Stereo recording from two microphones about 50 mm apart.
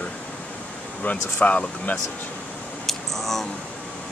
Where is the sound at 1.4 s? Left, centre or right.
Left.